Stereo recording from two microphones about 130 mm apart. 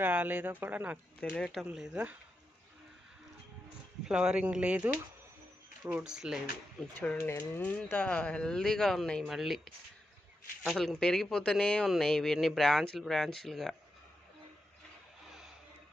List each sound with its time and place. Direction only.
0.0 s speech: 10° right (ahead or behind)
1.2 s speech: 5° left (ahead or behind)
4.1 s speech: 5° right (ahead or behind)
6.7 s speech: 10° left (ahead or behind)
7.2 s speech: 20° left (ahead or behind)
7.9 s speech: 10° left (ahead or behind)
15.3 s a sound: centre (ahead or behind)